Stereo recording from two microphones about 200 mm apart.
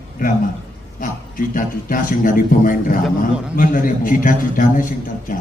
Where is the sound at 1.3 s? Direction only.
45° left (ahead or behind).